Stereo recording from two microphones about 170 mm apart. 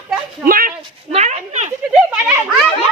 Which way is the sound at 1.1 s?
40° right (ahead or behind).